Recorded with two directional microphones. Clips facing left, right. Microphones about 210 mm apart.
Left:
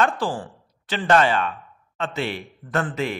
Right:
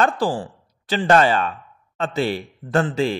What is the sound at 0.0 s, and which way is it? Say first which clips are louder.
A man's voice: right 3 dB; 35° right (ahead or behind).